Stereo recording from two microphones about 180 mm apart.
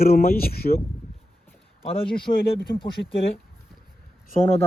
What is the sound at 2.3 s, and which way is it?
Speech, 55° left (ahead or behind).